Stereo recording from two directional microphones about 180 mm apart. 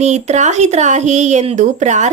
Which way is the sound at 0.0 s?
40° right (ahead or behind).